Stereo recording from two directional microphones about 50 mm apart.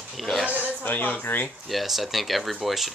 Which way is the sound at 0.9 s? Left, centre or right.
Left.